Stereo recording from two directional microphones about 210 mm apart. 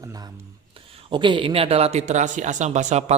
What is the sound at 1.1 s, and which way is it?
A man's voice, 25° right (ahead or behind).